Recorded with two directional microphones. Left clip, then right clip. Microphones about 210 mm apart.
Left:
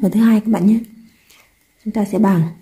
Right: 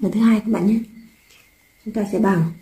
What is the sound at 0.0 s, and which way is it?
Speech, 40° left (ahead or behind).